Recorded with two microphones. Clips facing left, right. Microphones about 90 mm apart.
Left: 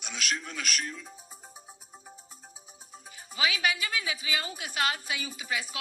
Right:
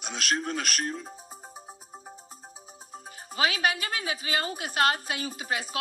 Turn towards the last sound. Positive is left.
turn(degrees=-45)  # may be behind; listen again after turning